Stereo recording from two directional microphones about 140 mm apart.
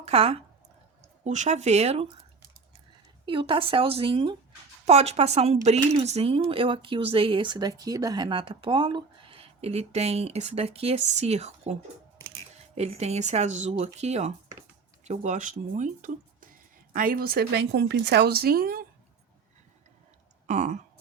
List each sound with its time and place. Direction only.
0.0 s a woman's voice: 45° right (ahead or behind)
1.2 s speech: 55° right (ahead or behind)
3.2 s a woman's voice: 35° right (ahead or behind)
4.9 s a woman's voice: 50° right (ahead or behind); by 18.9 s 90° right
20.5 s a sound: 60° right (ahead or behind)